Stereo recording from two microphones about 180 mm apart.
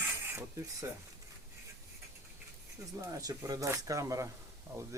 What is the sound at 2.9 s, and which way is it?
Speech, 15° right (ahead or behind).